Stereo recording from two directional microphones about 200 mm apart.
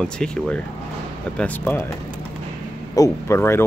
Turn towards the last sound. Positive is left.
turn(degrees=10)  # may be behind; listen again after turning